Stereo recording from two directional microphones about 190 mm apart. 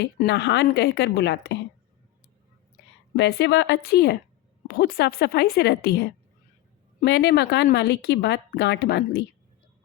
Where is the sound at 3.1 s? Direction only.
65° left (ahead or behind).